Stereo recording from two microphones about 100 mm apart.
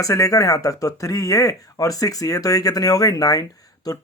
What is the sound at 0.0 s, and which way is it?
Speech, 35° left (ahead or behind).